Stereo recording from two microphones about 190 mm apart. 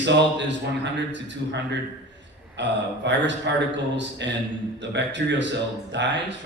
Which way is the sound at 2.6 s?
70° right (ahead or behind).